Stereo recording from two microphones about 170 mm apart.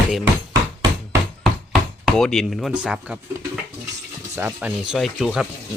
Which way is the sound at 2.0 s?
5° left (ahead or behind).